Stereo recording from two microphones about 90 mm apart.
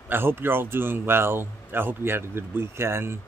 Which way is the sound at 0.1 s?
25° right (ahead or behind).